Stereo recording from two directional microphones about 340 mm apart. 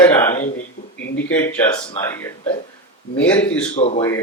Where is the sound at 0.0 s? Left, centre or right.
Centre.